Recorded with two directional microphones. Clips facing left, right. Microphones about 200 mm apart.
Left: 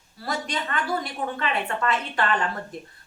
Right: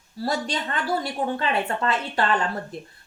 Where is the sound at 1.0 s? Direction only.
30° right (ahead or behind).